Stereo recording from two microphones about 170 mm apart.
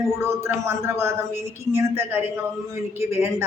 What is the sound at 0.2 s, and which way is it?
A woman's voice, 15° right (ahead or behind).